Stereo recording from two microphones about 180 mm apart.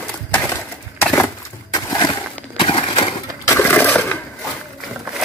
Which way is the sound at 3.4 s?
10° left (ahead or behind).